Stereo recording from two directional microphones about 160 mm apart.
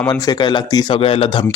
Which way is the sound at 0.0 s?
25° left (ahead or behind).